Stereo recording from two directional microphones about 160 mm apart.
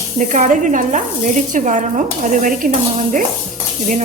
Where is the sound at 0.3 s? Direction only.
50° right (ahead or behind).